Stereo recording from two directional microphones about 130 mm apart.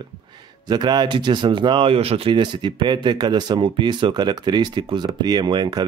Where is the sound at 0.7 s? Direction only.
35° right (ahead or behind).